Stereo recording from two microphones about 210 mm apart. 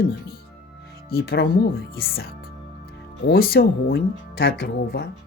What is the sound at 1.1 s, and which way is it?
Speech, 45° left (ahead or behind).